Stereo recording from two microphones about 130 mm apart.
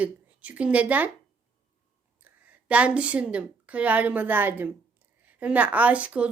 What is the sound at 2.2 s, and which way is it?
A woman's voice, 10° right (ahead or behind).